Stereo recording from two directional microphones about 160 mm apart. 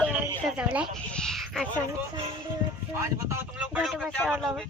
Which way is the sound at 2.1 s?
30° right (ahead or behind).